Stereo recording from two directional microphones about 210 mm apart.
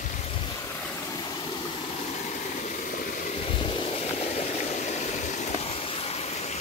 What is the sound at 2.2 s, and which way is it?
Vehicle, 35° left (ahead or behind).